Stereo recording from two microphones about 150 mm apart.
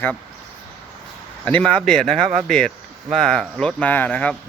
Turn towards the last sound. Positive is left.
turn(degrees=10)  # may be behind; listen again after turning